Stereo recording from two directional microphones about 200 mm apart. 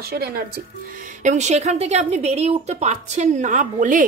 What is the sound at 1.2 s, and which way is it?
A woman's voice, 35° right (ahead or behind).